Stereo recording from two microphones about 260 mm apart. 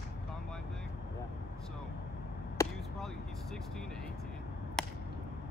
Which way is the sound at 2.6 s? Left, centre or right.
Centre.